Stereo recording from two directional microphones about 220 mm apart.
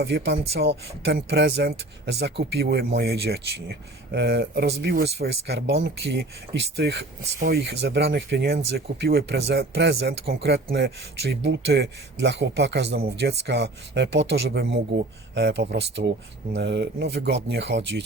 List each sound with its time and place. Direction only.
0.0 s speech: 50° right (ahead or behind)